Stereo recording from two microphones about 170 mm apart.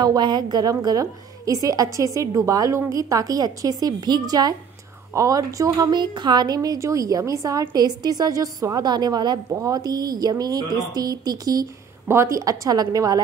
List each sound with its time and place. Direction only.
0.0 s a woman's voice: 25° right (ahead or behind)